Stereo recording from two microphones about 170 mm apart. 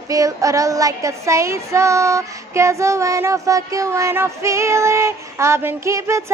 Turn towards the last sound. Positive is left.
turn(degrees=-15)  # may be behind; listen again after turning